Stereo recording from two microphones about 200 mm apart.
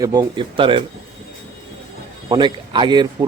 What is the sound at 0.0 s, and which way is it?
Speech, 20° right (ahead or behind).